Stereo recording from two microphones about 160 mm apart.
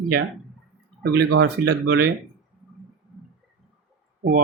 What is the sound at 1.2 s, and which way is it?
Speech, 90° right.